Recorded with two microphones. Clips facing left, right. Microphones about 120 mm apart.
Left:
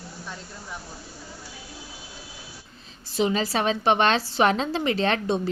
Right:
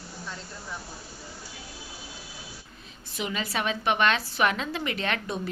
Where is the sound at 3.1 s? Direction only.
30° left (ahead or behind).